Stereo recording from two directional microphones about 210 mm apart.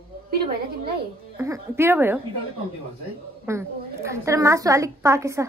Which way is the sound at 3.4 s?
15° right (ahead or behind).